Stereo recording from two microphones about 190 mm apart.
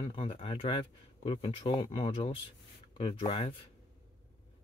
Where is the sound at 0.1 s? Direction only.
30° left (ahead or behind).